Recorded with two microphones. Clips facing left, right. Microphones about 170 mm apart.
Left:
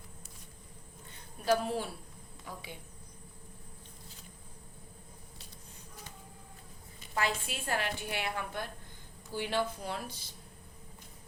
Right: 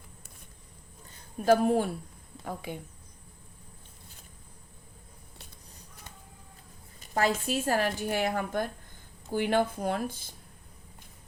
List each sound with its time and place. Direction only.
1.5 s a woman's voice: 50° right (ahead or behind)
7.1 s a woman's voice: 40° right (ahead or behind)